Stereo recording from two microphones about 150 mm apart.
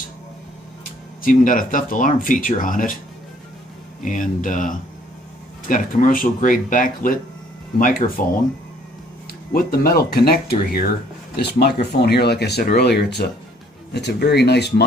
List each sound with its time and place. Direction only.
1.2 s speech: 65° left (ahead or behind)
4.0 s speech: 60° left (ahead or behind)
8.2 s speech: 65° left (ahead or behind)
9.5 s speech: 80° left